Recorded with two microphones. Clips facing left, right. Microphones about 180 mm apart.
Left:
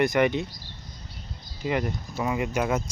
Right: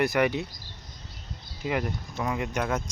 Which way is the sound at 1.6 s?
Centre (ahead or behind).